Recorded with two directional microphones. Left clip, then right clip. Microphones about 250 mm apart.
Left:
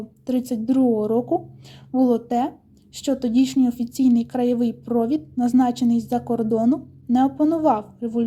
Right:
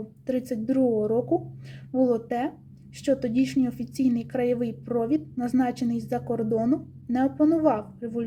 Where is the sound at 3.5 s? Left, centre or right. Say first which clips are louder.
Left 5 dB; left.